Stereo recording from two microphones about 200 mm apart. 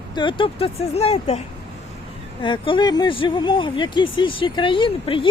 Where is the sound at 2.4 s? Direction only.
25° left (ahead or behind).